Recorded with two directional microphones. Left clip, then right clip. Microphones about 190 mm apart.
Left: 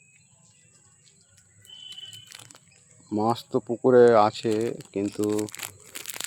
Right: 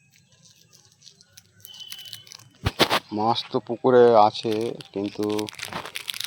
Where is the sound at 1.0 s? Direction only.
60° right (ahead or behind).